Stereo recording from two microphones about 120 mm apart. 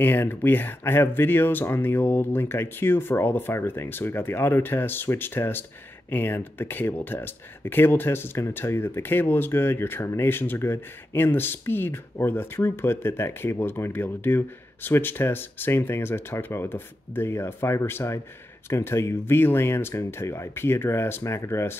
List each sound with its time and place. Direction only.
0.0 s speech: 15° left (ahead or behind)